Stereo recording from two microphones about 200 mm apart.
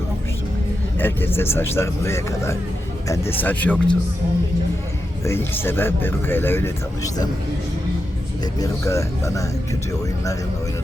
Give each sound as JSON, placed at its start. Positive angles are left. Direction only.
{"t": 0.9, "sound": "speech", "side_deg": 10}
{"t": 5.2, "sound": "speech", "side_deg": 10}
{"t": 8.5, "sound": "speech", "side_deg": 15}